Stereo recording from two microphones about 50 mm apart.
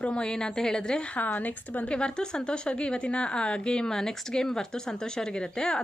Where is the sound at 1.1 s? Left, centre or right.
Left.